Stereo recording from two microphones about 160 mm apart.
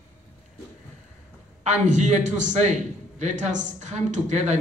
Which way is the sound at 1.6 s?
50° right (ahead or behind).